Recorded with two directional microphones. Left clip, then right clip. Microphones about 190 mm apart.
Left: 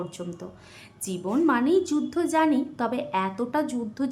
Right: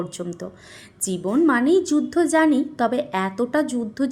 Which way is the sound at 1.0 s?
20° right (ahead or behind).